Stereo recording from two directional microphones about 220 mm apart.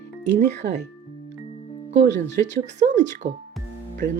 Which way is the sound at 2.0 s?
50° right (ahead or behind).